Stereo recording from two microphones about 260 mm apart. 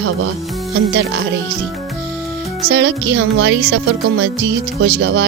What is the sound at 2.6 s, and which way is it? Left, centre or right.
Music, right.